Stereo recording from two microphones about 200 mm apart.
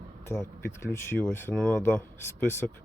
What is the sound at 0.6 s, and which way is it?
A man's voice, 10° left (ahead or behind).